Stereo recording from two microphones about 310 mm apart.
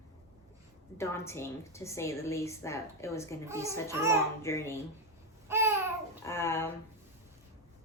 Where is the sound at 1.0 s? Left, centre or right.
Centre.